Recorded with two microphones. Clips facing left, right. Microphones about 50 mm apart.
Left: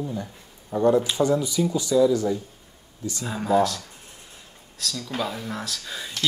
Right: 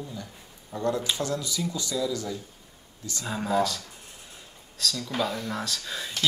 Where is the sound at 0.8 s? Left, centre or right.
Centre.